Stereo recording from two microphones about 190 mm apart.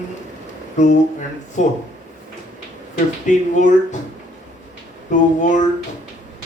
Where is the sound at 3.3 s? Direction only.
40° left (ahead or behind).